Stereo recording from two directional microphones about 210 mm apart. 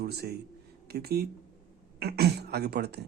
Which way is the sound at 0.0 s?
50° right (ahead or behind).